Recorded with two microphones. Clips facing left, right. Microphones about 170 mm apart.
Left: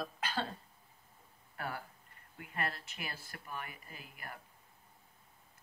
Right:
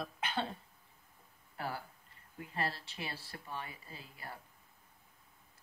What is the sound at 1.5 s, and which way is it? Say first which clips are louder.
Speech: right 1 dB; 25° right (ahead or behind).